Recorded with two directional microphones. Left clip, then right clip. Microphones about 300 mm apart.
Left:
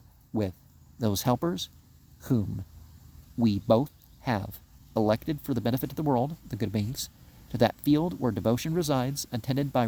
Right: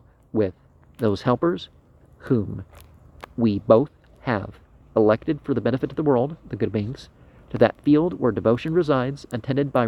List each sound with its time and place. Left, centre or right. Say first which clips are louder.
0.9 s speech: right 6 dB; left